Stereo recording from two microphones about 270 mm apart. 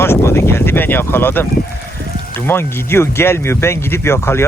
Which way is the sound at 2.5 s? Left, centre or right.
Centre.